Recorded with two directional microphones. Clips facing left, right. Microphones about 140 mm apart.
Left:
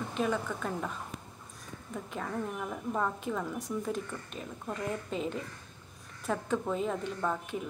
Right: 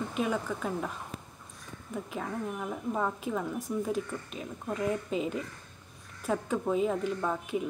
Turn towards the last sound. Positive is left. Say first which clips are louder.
# right 2 dB
turn(degrees=-10)  # may be behind; listen again after turning